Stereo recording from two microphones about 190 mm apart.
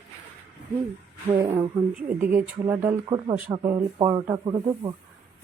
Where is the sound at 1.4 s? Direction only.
10° right (ahead or behind).